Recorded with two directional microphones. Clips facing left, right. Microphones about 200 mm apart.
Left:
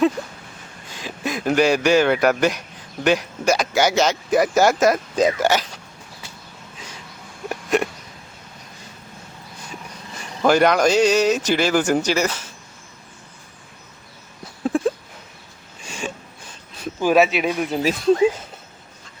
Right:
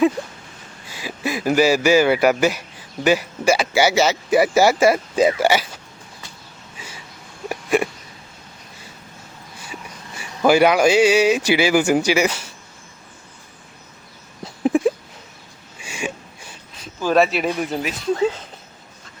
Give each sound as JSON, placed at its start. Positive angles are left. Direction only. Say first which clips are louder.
{"t": 0.9, "sound": "speech", "louder": "right 2 dB", "side_deg": -5}
{"t": 6.7, "sound": "a sound", "louder": "right 1 dB", "side_deg": -5}
{"t": 10.2, "sound": "speech", "louder": "right 2 dB", "side_deg": -10}
{"t": 14.6, "sound": "a sound", "louder": "right 3 dB", "side_deg": -15}
{"t": 17.0, "sound": "speech", "louder": "left 1 dB", "side_deg": 10}
{"t": 17.2, "sound": "speech", "louder": "even", "side_deg": 0}
{"t": 18.2, "sound": "speech", "louder": "left 3 dB", "side_deg": 10}